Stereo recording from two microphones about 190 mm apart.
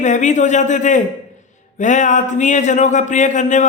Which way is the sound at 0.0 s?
40° left (ahead or behind).